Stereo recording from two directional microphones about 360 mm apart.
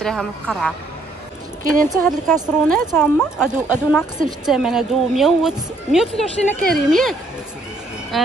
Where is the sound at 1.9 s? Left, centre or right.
Centre.